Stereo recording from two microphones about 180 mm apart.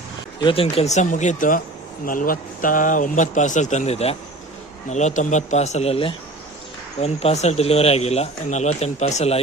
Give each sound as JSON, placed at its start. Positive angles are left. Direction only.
{"t": 0.3, "sound": "a man's voice", "side_deg": 30}